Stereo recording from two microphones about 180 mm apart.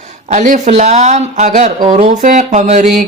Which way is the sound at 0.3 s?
45° right (ahead or behind).